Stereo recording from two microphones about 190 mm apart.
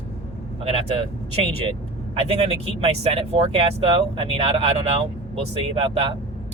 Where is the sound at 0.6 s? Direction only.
30° right (ahead or behind).